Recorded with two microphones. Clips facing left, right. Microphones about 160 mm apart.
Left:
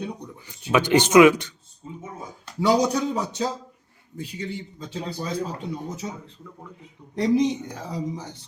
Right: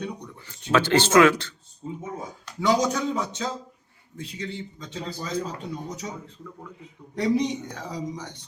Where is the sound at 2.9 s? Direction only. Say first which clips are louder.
Left 2 dB; 35° left (ahead or behind).